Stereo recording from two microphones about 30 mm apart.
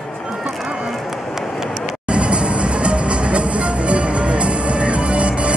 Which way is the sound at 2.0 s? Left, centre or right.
Right.